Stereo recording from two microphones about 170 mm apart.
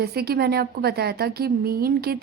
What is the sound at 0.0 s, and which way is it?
A woman's voice, 65° right (ahead or behind).